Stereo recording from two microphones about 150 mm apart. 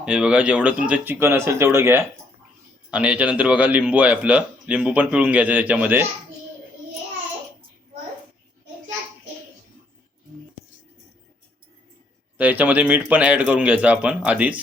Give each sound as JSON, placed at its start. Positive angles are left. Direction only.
{"t": 0.0, "sound": "a man's voice", "side_deg": -5}
{"t": 12.4, "sound": "a man's voice", "side_deg": -10}